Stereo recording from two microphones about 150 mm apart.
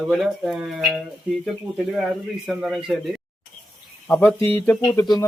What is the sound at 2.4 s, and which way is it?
Speech, 5° right (ahead or behind).